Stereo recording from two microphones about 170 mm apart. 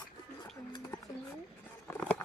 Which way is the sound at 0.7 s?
20° left (ahead or behind).